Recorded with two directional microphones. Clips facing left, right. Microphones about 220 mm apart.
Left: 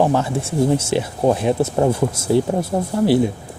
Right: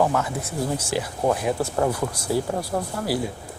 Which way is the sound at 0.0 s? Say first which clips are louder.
Left 5 dB; 30° left (ahead or behind).